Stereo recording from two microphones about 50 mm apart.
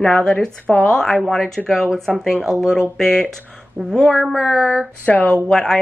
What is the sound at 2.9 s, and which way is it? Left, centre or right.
Speech, centre.